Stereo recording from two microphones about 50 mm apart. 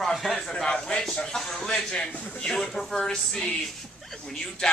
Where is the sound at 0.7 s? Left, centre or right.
Centre.